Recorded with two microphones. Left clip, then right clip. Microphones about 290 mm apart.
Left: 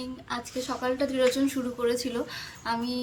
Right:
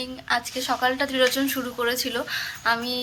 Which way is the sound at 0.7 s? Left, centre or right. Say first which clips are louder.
Right 5 dB; right.